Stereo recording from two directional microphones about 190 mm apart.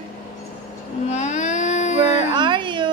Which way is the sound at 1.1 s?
35° left (ahead or behind).